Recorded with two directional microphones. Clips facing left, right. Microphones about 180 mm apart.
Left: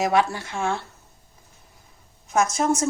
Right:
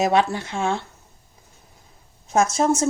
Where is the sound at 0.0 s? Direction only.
20° right (ahead or behind).